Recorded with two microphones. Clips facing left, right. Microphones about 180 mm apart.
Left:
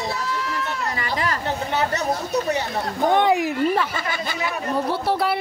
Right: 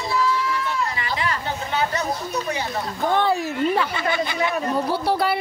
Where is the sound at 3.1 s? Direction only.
15° left (ahead or behind).